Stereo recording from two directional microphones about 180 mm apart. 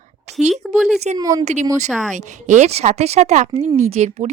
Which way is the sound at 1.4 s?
40° right (ahead or behind).